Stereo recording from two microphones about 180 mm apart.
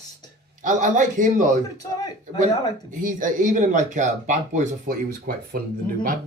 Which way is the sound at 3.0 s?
45° right (ahead or behind).